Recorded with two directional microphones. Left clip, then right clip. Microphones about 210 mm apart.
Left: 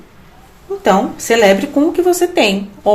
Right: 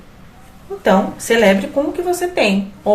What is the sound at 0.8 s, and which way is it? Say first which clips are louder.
A woman's voice: left 2 dB; 40° left (ahead or behind).